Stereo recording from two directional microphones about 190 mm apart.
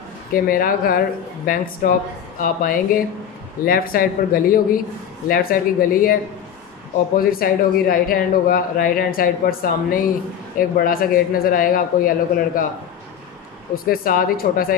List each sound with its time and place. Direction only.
0.3 s speech: 50° left (ahead or behind)
7.2 s speech: 50° left (ahead or behind)
13.8 s speech: 50° left (ahead or behind)